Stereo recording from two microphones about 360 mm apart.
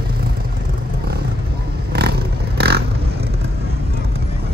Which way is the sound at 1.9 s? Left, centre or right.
Right.